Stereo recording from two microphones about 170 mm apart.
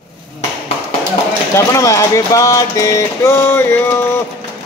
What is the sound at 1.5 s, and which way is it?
Speech, 20° left (ahead or behind).